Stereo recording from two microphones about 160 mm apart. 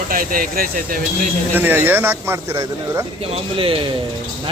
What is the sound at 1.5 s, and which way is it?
Speech, 10° right (ahead or behind).